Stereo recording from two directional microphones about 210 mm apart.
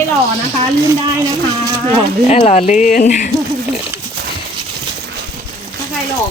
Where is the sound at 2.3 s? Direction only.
35° left (ahead or behind).